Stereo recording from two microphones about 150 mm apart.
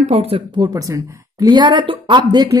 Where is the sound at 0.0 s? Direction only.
40° right (ahead or behind).